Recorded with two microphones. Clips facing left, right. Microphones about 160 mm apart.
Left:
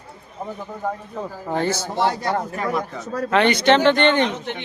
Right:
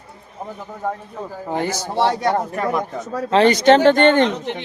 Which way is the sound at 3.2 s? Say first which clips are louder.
Right 4 dB; 35° right (ahead or behind).